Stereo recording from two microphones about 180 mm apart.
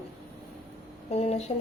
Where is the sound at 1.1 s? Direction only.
35° left (ahead or behind).